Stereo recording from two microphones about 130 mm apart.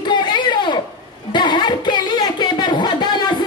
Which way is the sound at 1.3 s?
35° left (ahead or behind).